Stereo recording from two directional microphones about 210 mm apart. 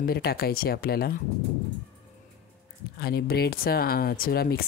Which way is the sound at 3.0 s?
45° left (ahead or behind).